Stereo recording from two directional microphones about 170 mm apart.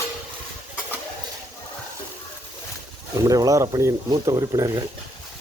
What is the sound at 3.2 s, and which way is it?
Speech, 20° right (ahead or behind).